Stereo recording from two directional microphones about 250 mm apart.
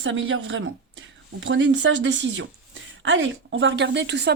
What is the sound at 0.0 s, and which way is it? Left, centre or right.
Speech, right.